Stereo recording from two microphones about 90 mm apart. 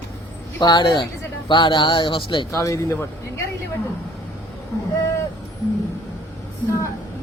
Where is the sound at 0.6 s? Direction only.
55° left (ahead or behind).